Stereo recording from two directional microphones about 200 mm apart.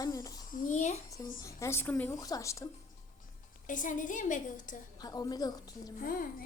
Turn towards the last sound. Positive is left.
turn(degrees=45)  # may be behind; listen again after turning